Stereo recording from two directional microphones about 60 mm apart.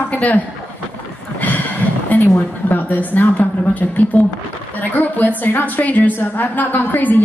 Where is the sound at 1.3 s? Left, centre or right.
Left.